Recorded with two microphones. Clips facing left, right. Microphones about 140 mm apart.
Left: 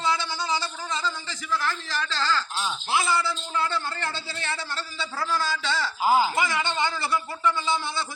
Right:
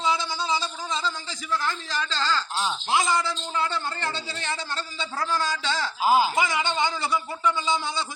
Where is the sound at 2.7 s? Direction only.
20° right (ahead or behind).